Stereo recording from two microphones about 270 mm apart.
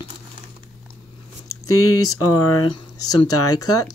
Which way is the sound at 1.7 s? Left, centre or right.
Left.